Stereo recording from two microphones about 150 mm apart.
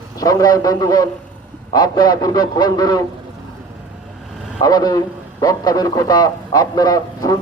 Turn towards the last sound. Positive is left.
turn(degrees=25)  # may be behind; listen again after turning